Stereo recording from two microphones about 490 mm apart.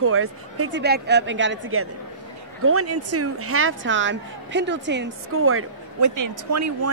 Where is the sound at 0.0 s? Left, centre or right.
Right.